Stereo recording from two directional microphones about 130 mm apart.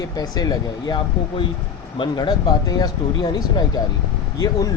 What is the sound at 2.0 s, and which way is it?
Speech, 35° left (ahead or behind).